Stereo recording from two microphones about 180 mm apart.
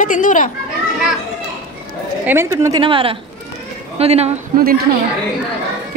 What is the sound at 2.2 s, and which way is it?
Speech, 15° right (ahead or behind).